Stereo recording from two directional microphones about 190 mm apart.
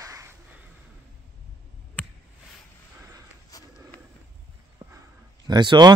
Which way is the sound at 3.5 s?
20° left (ahead or behind).